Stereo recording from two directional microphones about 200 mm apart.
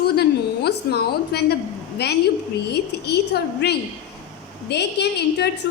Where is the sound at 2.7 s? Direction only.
55° left (ahead or behind).